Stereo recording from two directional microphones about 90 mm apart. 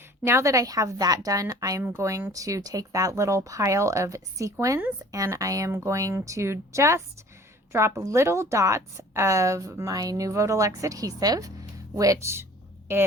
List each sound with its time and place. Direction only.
0.3 s a woman's voice: 30° right (ahead or behind)
1.8 s a woman's voice: 30° right (ahead or behind)